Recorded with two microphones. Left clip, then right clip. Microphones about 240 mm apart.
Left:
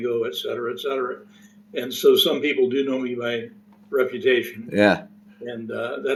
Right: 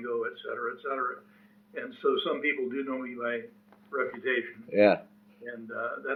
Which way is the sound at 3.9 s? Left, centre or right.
Centre.